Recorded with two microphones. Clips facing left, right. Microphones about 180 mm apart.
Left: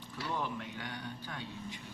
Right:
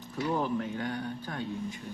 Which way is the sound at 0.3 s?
40° right (ahead or behind).